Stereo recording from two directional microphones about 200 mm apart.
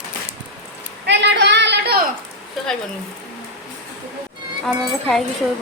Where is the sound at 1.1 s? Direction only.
60° right (ahead or behind).